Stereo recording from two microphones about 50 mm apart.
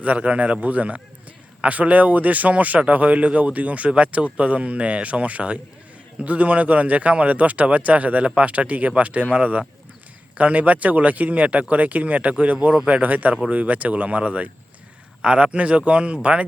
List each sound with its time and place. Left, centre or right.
0.0 s a man's voice: right
12.7 s speech: centre
13.0 s a man's voice: right